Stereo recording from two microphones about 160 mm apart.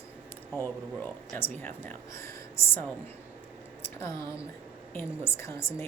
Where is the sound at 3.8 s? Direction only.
15° left (ahead or behind).